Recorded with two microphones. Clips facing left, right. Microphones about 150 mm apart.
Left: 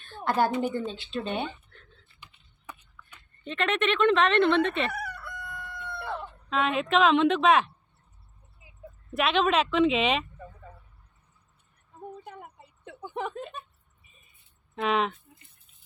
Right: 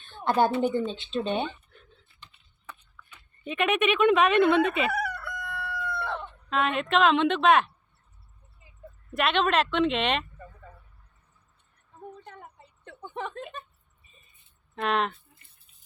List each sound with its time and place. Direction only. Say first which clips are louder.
0.3 s speech: right 2 dB; 20° right (ahead or behind)
1.7 s typing: right 1 dB; 10° right (ahead or behind)
2.2 s a sound: left 1 dB; 10° left (ahead or behind)
3.4 s fowl: right 2 dB; 10° right (ahead or behind)
4.9 s crowing: right 6 dB; 90° right
6.1 s speech: left 2 dB; centre (ahead or behind)
8.6 s a sound: left 2 dB; 5° left (ahead or behind)
9.1 s speech: even; centre (ahead or behind)
11.9 s a sound: left 2 dB; 10° left (ahead or behind)
14.8 s speech: left 1 dB; centre (ahead or behind)